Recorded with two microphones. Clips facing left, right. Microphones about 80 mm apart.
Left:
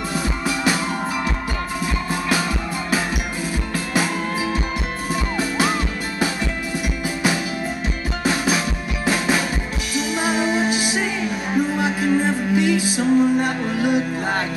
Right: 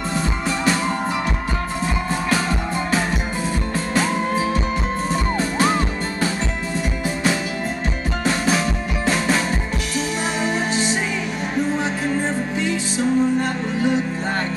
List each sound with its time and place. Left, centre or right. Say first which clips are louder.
3.9 s music: right 2 dB; centre
8.2 s music: right 1 dB; centre
10.4 s music: left 1 dB; centre